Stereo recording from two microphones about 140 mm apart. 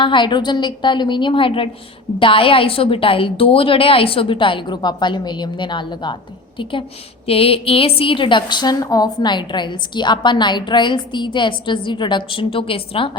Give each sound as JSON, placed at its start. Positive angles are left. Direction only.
{"t": 0.0, "sound": "a woman's voice", "side_deg": 35}